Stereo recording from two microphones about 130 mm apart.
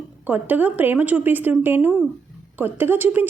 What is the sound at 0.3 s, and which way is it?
A woman's voice, 15° right (ahead or behind).